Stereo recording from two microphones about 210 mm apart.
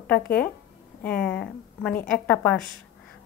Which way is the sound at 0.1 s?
5° left (ahead or behind).